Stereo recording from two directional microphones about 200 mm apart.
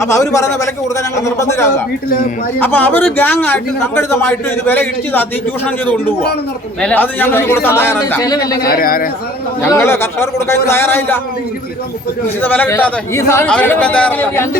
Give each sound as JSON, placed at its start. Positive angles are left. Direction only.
{"t": 0.0, "sound": "a man's voice", "side_deg": 15}
{"t": 8.6, "sound": "speech", "side_deg": 45}
{"t": 9.6, "sound": "a man's voice", "side_deg": 15}
{"t": 12.4, "sound": "a man's voice", "side_deg": 10}